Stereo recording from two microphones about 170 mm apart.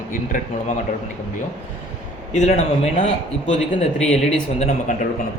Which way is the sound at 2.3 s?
40° left (ahead or behind).